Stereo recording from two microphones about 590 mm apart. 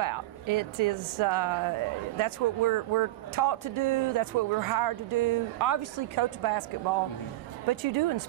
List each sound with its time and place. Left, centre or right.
0.0 s speech: right
7.6 s speech: right